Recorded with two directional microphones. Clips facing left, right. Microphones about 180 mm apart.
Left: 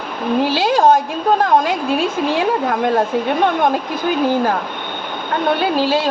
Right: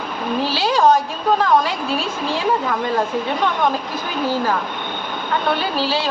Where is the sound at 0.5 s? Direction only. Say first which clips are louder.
Left 1 dB; 50° left (ahead or behind).